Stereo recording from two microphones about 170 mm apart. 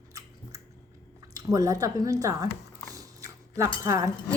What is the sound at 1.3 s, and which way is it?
Speech, 20° right (ahead or behind).